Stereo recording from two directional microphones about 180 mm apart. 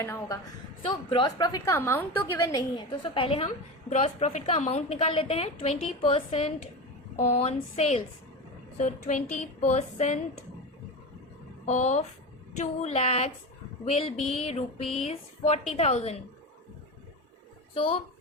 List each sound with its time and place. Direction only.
0.0 s a woman's voice: 15° left (ahead or behind)
0.9 s a woman's voice: 25° left (ahead or behind)
11.6 s a woman's voice: 40° left (ahead or behind)
17.7 s a woman's voice: 30° left (ahead or behind)